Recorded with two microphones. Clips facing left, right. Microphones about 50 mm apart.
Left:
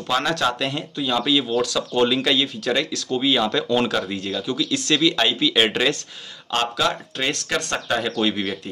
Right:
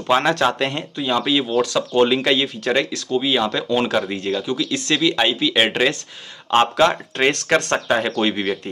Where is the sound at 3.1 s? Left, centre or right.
Centre.